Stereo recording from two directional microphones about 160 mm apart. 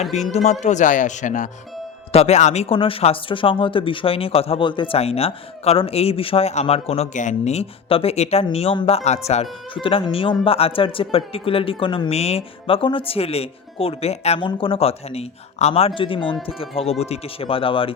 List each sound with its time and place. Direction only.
0.3 s speech: 45° left (ahead or behind)